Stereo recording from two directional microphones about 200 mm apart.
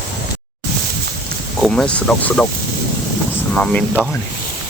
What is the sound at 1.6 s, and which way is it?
Speech, 5° left (ahead or behind).